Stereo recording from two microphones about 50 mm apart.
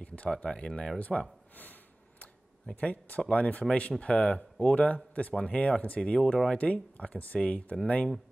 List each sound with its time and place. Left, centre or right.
0.0 s a sound: left
0.3 s speech: left
1.6 s snort: left
2.8 s speech: left